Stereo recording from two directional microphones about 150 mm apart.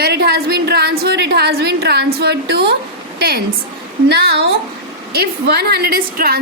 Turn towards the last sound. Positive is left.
turn(degrees=-90)